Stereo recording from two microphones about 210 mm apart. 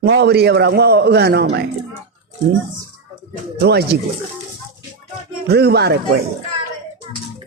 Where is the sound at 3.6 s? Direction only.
50° right (ahead or behind).